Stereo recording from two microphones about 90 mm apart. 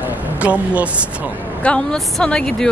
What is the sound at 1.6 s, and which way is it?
Speech, 10° left (ahead or behind).